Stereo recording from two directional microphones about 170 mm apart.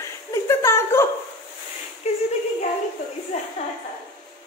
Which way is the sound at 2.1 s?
35° left (ahead or behind).